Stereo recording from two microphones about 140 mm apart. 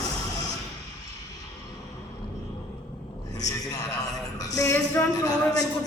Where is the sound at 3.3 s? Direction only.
25° left (ahead or behind).